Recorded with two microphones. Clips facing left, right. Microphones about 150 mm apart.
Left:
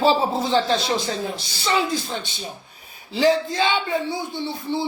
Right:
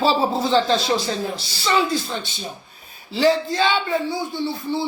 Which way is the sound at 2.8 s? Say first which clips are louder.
Right 1 dB; 20° left (ahead or behind).